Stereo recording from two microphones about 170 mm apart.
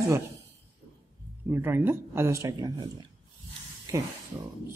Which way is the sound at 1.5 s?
15° right (ahead or behind).